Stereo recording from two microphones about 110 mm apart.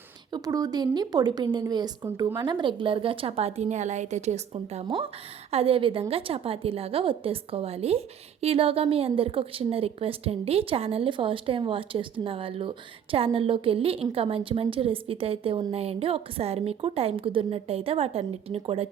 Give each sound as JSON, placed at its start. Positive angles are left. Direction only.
{"t": 0.3, "sound": "a woman's voice", "side_deg": -40}
{"t": 4.9, "sound": "a woman's voice", "side_deg": -55}